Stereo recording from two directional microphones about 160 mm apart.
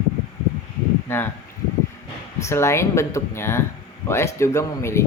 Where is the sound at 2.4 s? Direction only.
15° left (ahead or behind).